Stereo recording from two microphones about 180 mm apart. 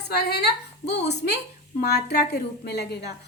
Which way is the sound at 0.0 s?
65° left (ahead or behind).